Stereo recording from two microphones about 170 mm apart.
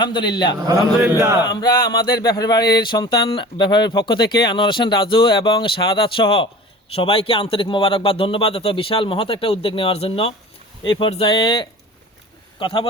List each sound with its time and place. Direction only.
0.0 s a man's voice: 25° left (ahead or behind)